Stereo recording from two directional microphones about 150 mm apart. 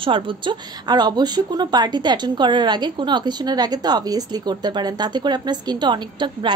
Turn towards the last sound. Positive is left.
turn(degrees=-30)  # may be behind; listen again after turning